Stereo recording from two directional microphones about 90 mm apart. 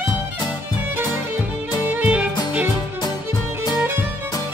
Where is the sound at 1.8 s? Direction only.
20° right (ahead or behind).